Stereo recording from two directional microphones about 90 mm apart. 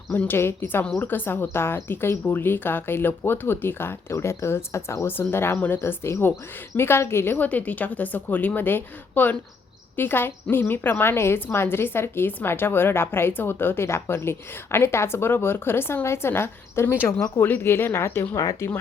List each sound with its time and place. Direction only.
0.1 s a woman's voice: 20° left (ahead or behind)
18.3 s speech: 40° left (ahead or behind)